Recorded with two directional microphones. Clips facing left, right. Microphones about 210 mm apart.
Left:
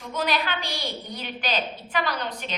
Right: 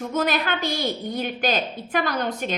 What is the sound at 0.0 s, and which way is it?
A woman's voice, 45° right (ahead or behind).